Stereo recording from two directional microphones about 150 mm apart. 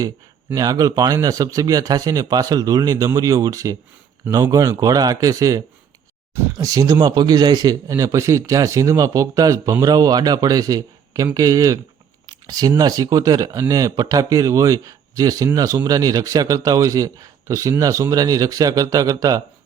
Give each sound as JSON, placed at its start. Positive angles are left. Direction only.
{"t": 0.5, "sound": "speech", "side_deg": -25}